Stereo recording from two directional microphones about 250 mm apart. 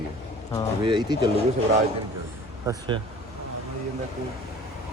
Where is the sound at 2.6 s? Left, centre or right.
Centre.